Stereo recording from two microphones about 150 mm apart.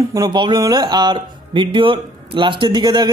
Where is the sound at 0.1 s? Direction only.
30° right (ahead or behind).